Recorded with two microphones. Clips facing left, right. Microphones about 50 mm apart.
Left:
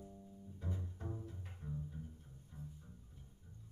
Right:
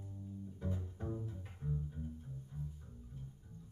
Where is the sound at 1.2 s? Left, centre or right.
Centre.